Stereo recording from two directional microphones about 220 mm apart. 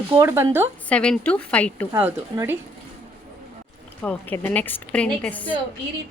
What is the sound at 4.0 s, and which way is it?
A woman's voice, 5° left (ahead or behind).